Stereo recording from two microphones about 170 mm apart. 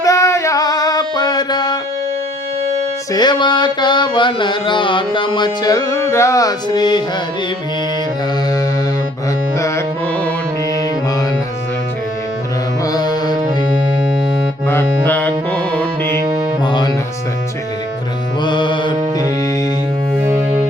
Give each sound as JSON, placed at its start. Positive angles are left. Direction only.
{"t": 0.0, "sound": "music", "side_deg": 20}
{"t": 3.1, "sound": "a sound", "side_deg": 25}
{"t": 9.6, "sound": "music", "side_deg": 20}
{"t": 12.8, "sound": "music", "side_deg": 25}
{"t": 14.7, "sound": "music", "side_deg": 10}
{"t": 16.0, "sound": "music", "side_deg": -25}
{"t": 16.6, "sound": "music", "side_deg": 25}
{"t": 18.4, "sound": "music", "side_deg": 25}